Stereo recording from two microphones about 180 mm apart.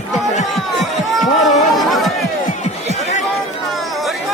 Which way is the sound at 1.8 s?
Centre (ahead or behind).